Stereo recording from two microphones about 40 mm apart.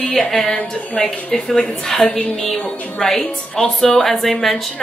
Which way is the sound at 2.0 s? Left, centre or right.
Left.